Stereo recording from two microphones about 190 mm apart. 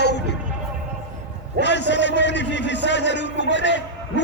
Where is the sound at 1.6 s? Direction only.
65° left (ahead or behind).